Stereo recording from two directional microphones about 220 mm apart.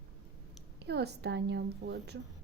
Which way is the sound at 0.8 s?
50° right (ahead or behind).